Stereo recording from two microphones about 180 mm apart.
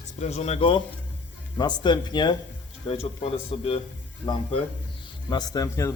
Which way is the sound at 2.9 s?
35° left (ahead or behind).